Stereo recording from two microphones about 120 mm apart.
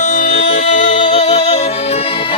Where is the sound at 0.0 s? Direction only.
80° left; by 1.6 s 65° left (ahead or behind).